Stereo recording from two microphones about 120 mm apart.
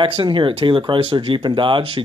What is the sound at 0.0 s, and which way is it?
A woman's voice, 45° right (ahead or behind).